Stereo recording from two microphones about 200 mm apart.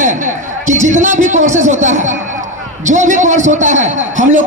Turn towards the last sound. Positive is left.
turn(degrees=-40)  # may be behind; listen again after turning